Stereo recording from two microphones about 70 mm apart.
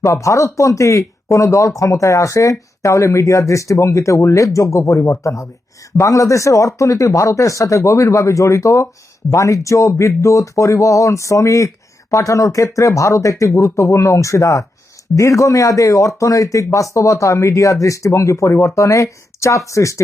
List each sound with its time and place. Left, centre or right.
0.0 s speech: left